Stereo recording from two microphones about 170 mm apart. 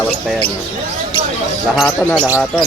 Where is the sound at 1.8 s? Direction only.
10° left (ahead or behind).